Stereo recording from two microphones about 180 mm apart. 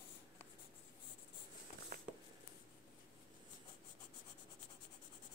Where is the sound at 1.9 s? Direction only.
55° right (ahead or behind).